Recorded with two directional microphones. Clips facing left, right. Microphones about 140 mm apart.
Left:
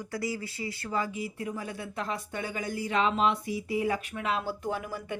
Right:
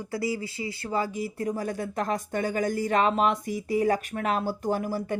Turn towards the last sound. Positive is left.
turn(degrees=-35)  # may be behind; listen again after turning